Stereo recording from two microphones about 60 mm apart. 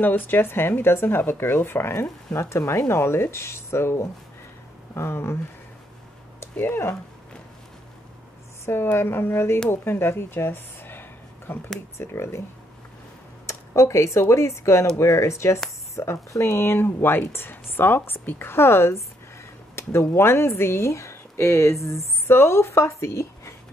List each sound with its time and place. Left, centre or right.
0.0 s speech: left
6.6 s speech: left
8.9 s speech: left
12.0 s speech: left
13.5 s a sound: left
14.3 s speech: left